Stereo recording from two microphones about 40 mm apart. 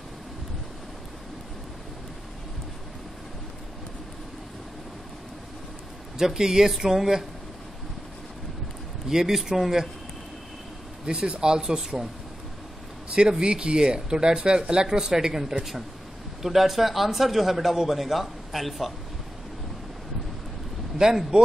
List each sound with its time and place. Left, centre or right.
6.1 s speech: centre
9.1 s speech: centre
11.1 s speech: right
13.1 s a man's voice: right; by 18.9 s centre
21.0 s speech: centre